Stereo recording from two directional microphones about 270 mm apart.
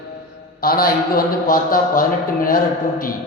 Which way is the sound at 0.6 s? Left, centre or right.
Left.